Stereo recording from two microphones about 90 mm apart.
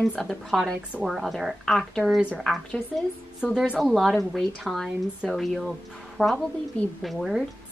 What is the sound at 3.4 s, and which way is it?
A woman's voice, 5° right (ahead or behind).